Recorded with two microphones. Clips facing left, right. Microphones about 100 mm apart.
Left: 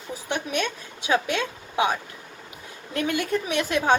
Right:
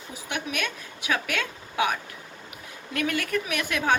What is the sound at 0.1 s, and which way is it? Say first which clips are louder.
A woman's voice: left 4 dB; 30° left (ahead or behind).